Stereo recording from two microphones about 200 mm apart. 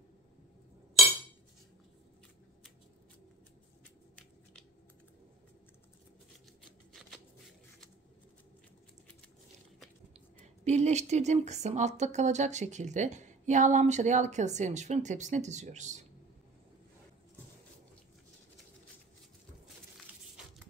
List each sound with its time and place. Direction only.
6.9 s shuffling cards: centre (ahead or behind)
10.1 s a woman's voice: 35° right (ahead or behind)